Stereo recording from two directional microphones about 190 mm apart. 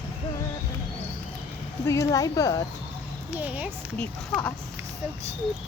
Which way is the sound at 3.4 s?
5° right (ahead or behind).